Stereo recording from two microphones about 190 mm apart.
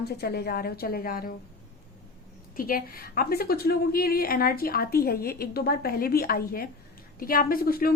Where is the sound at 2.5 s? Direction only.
50° left (ahead or behind).